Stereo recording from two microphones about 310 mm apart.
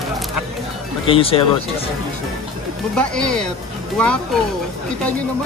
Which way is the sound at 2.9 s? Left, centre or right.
Centre.